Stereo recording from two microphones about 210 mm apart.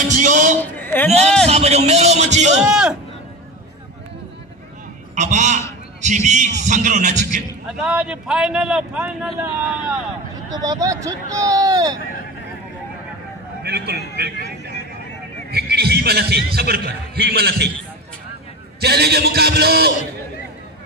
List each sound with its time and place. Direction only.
0.1 s a sound: 40° right (ahead or behind)
0.7 s a sound: 10° left (ahead or behind)
1.5 s a man's voice: 30° right (ahead or behind)
2.6 s speech: 5° right (ahead or behind)
5.1 s a man's voice: 35° right (ahead or behind)
7.6 s speech: 5° right (ahead or behind)
10.5 s speech: 15° right (ahead or behind)
13.6 s speech: 50° right (ahead or behind)
15.5 s a man's voice: 50° right (ahead or behind)
18.8 s a man's voice: 50° right (ahead or behind)